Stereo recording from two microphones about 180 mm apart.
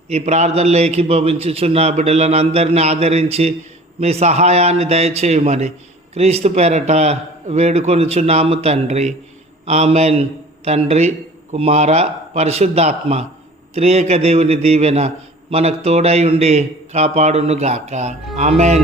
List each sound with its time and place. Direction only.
0.1 s a man's voice: 35° right (ahead or behind)